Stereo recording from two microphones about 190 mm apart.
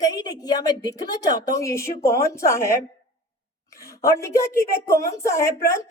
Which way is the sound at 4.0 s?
15° left (ahead or behind).